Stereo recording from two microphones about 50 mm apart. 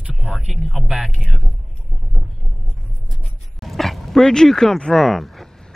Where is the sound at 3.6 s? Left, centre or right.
Centre.